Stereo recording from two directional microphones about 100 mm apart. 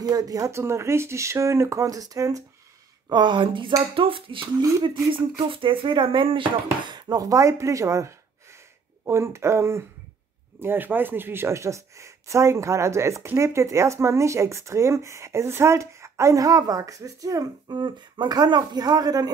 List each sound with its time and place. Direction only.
0.0 s speech: 35° right (ahead or behind)
3.1 s speech: 50° right (ahead or behind)
3.9 s speech: 65° right (ahead or behind); by 17.7 s 35° right (ahead or behind)
17.7 s speech: 50° right (ahead or behind)